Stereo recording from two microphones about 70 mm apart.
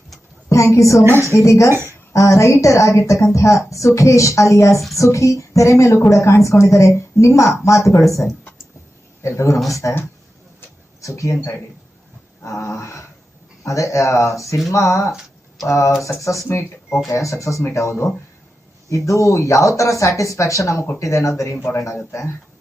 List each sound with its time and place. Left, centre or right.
0.4 s a woman's voice: left
11.0 s speech: left
12.4 s a woman's voice: left
18.9 s a woman's voice: left
21.6 s a woman's voice: left